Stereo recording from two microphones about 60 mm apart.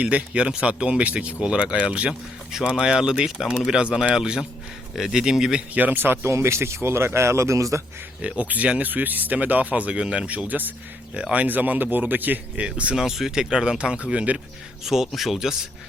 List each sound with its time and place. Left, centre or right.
0.0 s speech: right
5.8 s speech: right
6.2 s speech: right
8.2 s speech: right
12.6 s speech: centre
13.0 s speech: centre
14.8 s speech: centre